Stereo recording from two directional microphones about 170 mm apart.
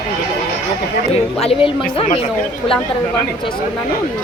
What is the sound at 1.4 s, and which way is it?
Speech, 35° left (ahead or behind).